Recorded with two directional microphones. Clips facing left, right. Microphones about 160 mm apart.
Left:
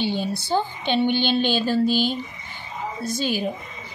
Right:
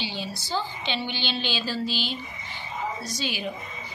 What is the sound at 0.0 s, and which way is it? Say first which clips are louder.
A woman's voice: left 9 dB; 50° left (ahead or behind).